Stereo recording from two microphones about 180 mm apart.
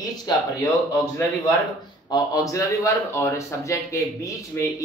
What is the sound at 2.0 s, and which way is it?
A man's voice, 20° left (ahead or behind).